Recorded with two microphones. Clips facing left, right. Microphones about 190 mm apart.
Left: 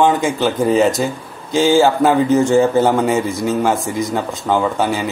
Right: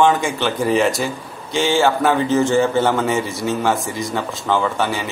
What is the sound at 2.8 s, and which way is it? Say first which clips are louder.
A man's voice: left 3 dB; 15° left (ahead or behind).